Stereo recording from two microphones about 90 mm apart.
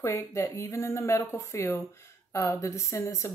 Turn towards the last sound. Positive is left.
turn(degrees=30)  # may be behind; listen again after turning